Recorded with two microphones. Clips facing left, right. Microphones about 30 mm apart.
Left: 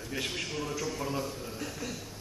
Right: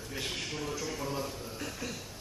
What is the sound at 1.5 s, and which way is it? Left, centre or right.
Speech, centre.